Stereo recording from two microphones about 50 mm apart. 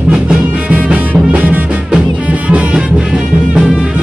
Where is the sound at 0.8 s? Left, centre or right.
Right.